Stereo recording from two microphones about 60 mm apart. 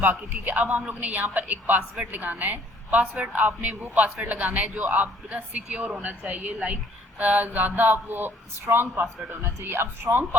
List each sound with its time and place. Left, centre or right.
0.0 s speech: right
7.2 s speech: right